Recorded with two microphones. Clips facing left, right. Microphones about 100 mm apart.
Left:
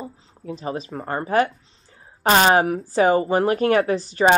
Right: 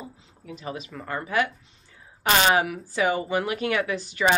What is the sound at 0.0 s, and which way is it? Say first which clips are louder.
A woman's voice: left 7 dB; 35° left (ahead or behind).